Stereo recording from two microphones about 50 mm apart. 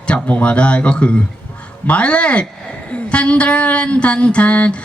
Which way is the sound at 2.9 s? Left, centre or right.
Left.